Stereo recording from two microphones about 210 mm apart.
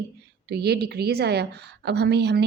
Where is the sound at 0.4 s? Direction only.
50° right (ahead or behind).